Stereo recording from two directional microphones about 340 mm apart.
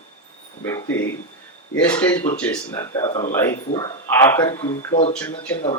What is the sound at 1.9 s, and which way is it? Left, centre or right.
A man's voice, centre.